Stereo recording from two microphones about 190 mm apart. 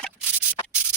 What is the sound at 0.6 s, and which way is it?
Sanding, 25° left (ahead or behind).